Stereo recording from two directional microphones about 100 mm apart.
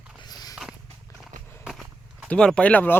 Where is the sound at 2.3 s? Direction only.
10° left (ahead or behind).